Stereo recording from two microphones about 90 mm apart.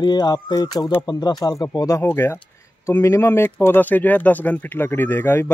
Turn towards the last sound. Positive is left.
turn(degrees=25)  # may be behind; listen again after turning